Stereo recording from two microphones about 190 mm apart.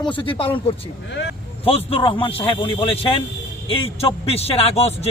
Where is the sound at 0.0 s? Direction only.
25° left (ahead or behind).